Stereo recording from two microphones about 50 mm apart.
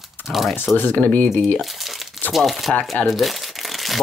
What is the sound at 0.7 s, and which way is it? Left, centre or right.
Speech, left.